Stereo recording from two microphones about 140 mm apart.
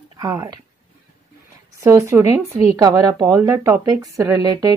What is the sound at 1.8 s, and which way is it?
Speech, 20° right (ahead or behind).